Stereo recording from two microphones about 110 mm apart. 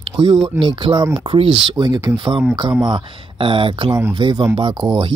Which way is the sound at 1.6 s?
40° right (ahead or behind).